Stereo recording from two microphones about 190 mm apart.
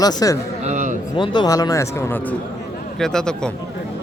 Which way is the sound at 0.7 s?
40° right (ahead or behind).